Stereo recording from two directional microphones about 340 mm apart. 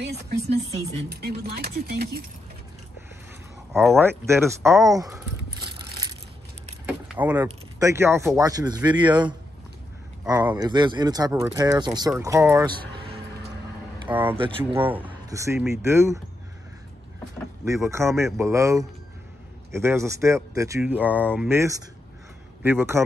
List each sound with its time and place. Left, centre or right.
0.0 s speech: right
3.7 s speech: centre
6.9 s vehicle: centre
7.4 s speech: centre
14.0 s speech: centre
17.6 s speech: centre